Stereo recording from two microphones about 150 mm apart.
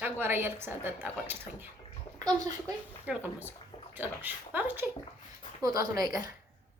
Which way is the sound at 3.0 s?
10° right (ahead or behind).